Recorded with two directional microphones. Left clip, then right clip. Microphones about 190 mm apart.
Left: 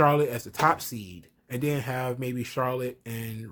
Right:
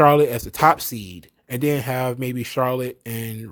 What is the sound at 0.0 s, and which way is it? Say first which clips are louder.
Speech: right 8 dB; 45° right (ahead or behind).